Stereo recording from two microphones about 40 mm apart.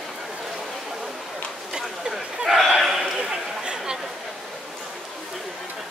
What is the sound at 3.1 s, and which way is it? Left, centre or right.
Chatter, centre.